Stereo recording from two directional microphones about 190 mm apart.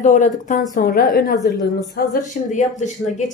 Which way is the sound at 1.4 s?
20° left (ahead or behind).